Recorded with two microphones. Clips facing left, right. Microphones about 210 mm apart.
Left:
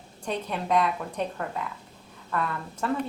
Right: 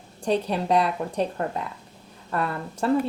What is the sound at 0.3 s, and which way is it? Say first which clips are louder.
Speech: right 5 dB; 35° right (ahead or behind).